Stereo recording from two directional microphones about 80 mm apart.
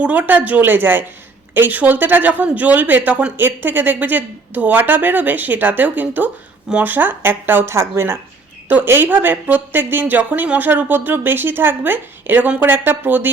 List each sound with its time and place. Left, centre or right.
0.0 s speech: centre